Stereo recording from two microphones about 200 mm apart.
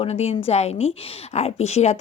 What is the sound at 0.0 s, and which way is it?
A woman's voice, 30° left (ahead or behind).